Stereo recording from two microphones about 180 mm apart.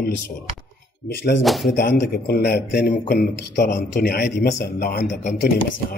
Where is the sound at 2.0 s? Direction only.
60° left (ahead or behind).